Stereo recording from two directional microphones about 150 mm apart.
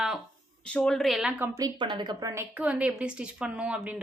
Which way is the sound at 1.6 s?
30° right (ahead or behind).